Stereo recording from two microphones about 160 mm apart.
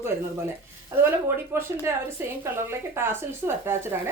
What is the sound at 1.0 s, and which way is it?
A woman's voice, 15° right (ahead or behind).